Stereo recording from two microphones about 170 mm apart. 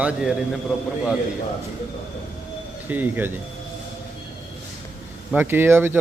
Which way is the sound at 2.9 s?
10° right (ahead or behind).